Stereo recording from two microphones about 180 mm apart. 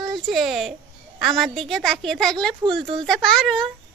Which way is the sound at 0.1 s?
Centre (ahead or behind).